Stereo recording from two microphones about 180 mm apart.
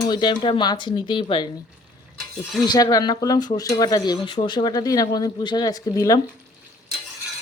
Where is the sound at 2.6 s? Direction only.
20° left (ahead or behind).